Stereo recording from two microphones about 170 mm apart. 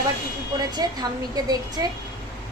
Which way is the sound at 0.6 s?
25° right (ahead or behind).